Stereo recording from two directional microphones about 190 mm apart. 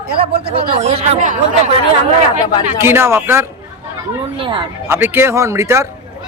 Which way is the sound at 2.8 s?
15° right (ahead or behind).